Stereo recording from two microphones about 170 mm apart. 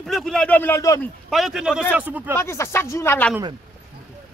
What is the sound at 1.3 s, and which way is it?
Speech, centre (ahead or behind).